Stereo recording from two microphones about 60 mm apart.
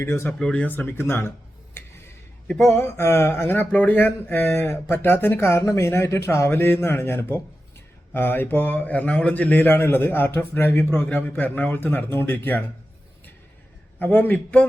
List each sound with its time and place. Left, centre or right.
0.0 s a man's voice: left
0.3 s speech: centre
0.6 s speech: left
2.7 s speech: left
6.6 s a man's voice: left
14.0 s a man's voice: left